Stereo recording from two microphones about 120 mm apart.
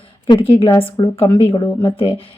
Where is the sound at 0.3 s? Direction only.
50° left (ahead or behind).